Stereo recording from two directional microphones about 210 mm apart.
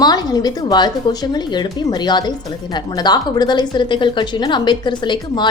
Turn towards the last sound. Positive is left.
turn(degrees=20)  # may be behind; listen again after turning